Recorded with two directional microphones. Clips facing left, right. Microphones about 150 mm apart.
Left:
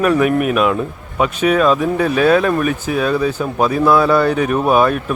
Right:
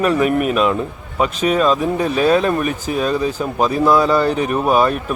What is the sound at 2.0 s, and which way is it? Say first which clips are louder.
Speech: left 2 dB; 35° right (ahead or behind).